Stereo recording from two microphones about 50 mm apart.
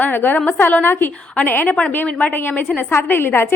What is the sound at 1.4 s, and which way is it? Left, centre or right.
Speech, left.